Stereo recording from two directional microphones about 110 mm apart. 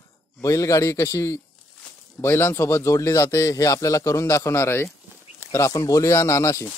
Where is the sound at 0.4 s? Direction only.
30° left (ahead or behind).